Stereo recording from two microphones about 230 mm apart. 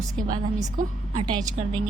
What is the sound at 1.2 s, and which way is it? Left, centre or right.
Speech, centre.